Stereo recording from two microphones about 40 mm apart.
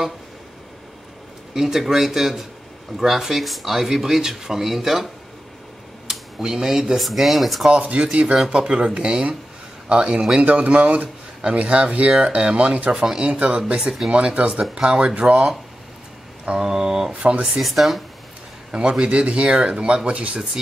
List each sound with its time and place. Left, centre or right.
1.5 s speech: centre
6.0 s a sound: centre
7.0 s speech: centre
7.8 s speech: right
13.8 s speech: centre
14.1 s speech: right
16.5 s speech: centre
17.6 s speech: centre
18.7 s speech: right